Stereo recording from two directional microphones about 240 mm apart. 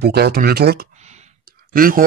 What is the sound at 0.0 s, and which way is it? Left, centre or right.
Speech, right.